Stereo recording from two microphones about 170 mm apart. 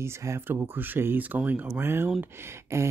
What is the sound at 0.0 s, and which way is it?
Speech, 15° right (ahead or behind).